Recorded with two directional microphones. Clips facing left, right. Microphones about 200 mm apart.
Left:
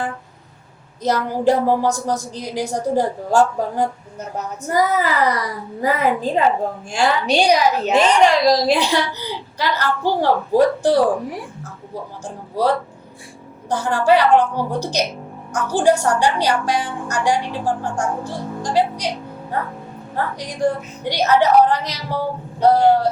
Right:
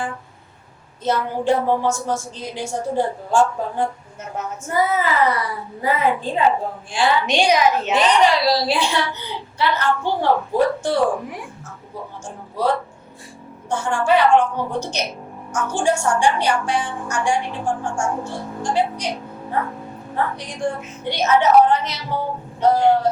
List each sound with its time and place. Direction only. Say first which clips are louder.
1.0 s a woman's voice: left 2 dB; 40° left (ahead or behind)
20.6 s a woman's voice: left 5 dB; 35° left (ahead or behind)